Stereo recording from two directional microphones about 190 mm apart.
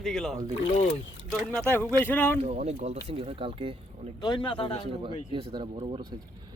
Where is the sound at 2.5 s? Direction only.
40° right (ahead or behind).